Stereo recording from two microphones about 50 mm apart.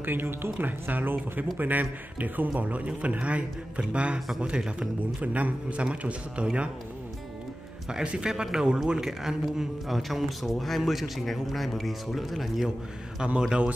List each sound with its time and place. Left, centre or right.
0.0 s a man's voice: right; by 4.8 s centre
5.2 s a man's voice: right
7.9 s a man's voice: centre
13.2 s a man's voice: centre